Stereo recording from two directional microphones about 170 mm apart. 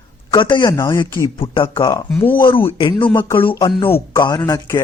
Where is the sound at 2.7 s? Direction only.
30° left (ahead or behind).